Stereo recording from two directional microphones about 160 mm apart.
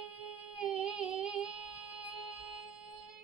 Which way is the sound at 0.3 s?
5° right (ahead or behind).